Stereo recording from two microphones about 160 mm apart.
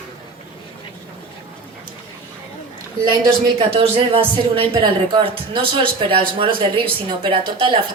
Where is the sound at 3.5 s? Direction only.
35° right (ahead or behind).